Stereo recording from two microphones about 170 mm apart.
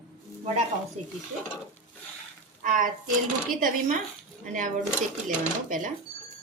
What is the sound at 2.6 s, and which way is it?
Speech, 50° right (ahead or behind).